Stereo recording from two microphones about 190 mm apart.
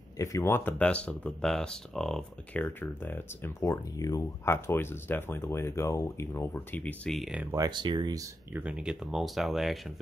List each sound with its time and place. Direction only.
0.2 s speech: 15° left (ahead or behind); by 7.4 s centre (ahead or behind)
7.5 s speech: 20° right (ahead or behind)
8.6 s speech: 5° right (ahead or behind)